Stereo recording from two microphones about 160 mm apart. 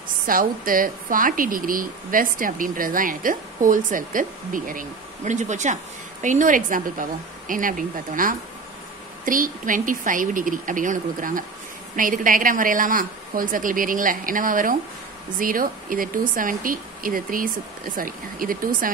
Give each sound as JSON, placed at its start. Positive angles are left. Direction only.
{"t": 0.3, "sound": "speech", "side_deg": -60}